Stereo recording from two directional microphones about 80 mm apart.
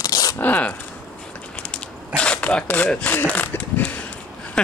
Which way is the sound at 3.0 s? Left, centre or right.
Centre.